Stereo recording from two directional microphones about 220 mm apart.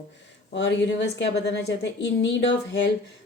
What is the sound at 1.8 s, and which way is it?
Speech, 55° left (ahead or behind).